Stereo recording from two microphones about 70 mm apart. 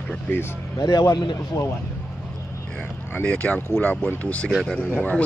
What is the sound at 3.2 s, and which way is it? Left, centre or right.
Speech, centre.